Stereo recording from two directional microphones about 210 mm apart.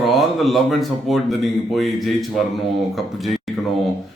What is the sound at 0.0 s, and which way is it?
Speech, centre (ahead or behind).